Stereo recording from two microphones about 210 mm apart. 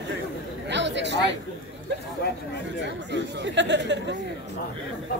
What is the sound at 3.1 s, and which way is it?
Speech, 55° right (ahead or behind).